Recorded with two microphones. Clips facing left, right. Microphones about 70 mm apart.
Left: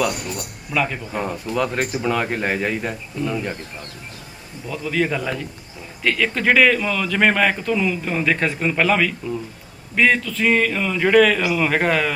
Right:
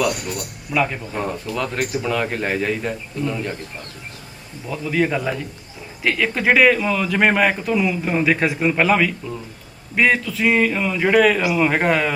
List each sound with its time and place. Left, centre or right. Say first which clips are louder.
0.7 s speech: right 2 dB; centre
1.1 s a man's voice: left 1 dB; centre
1.8 s speech: even; centre
2.0 s a man's voice: left 2 dB; centre
4.7 s speech: right 2 dB; centre